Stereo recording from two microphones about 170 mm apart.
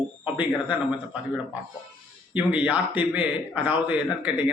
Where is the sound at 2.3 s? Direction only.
10° right (ahead or behind).